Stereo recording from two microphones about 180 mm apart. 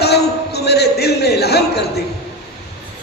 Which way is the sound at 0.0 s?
65° left (ahead or behind).